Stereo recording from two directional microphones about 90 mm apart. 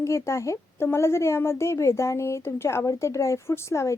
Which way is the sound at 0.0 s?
35° left (ahead or behind).